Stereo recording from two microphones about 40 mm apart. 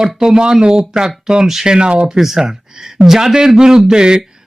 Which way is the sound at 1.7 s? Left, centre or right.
Right.